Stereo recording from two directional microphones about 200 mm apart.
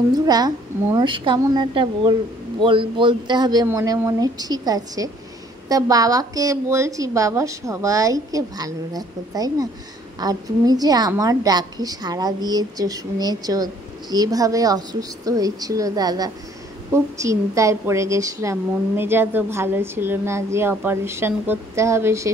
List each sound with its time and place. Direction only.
0.3 s a woman's voice: 20° right (ahead or behind)